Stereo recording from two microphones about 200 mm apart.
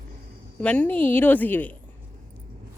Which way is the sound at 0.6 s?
5° left (ahead or behind).